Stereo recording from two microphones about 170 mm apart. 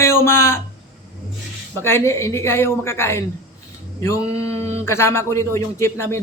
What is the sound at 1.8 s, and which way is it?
Speech, 15° left (ahead or behind).